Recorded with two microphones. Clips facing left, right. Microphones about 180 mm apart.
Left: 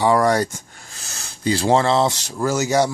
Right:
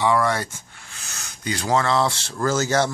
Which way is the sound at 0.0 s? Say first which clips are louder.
Left 4 dB; 40° left (ahead or behind).